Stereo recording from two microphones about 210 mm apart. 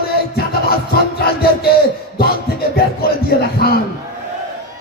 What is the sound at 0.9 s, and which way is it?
Music, 45° left (ahead or behind).